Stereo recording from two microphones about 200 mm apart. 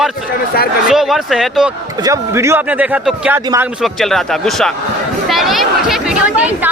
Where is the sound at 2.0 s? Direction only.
15° right (ahead or behind).